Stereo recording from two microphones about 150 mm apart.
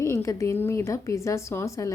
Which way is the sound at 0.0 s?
20° left (ahead or behind).